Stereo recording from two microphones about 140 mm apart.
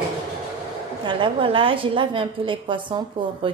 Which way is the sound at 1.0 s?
35° right (ahead or behind).